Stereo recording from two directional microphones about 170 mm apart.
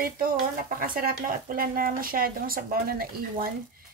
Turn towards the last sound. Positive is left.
turn(degrees=-60)  # may be behind; listen again after turning